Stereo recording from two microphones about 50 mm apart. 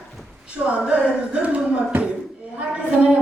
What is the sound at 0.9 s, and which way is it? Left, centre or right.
Music, right.